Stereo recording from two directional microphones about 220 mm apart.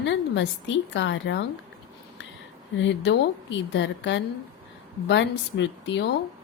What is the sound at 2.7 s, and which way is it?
A woman's voice, 55° left (ahead or behind).